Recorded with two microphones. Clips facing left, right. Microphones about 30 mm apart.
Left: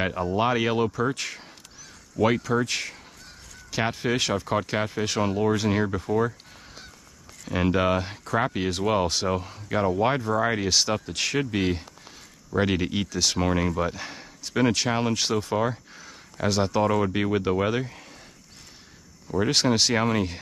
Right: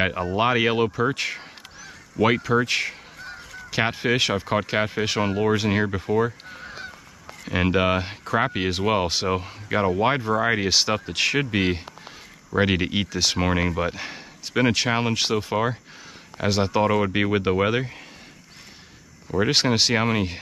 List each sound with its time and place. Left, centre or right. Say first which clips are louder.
0.0 s speech: right 2 dB; right
19.2 s speech: right 2 dB; centre